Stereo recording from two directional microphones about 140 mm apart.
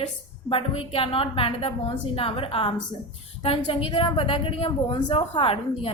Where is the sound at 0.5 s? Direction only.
40° left (ahead or behind).